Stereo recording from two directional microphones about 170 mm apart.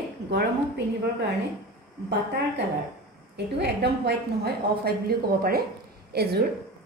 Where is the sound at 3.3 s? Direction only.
85° right; by 6.5 s 70° right (ahead or behind).